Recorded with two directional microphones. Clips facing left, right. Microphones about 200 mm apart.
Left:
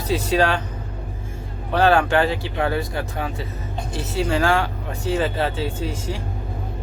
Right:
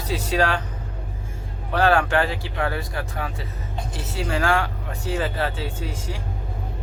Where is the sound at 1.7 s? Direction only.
25° left (ahead or behind).